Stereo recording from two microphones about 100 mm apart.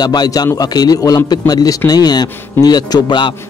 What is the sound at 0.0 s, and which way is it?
A man's voice, 45° left (ahead or behind).